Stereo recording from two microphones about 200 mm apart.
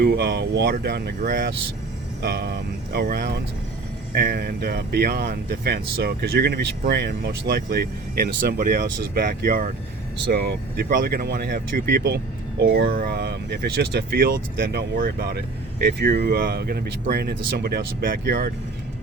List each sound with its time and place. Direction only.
0.0 s speech: 50° right (ahead or behind)